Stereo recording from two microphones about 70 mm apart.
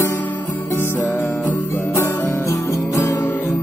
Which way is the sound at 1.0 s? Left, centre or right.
Left.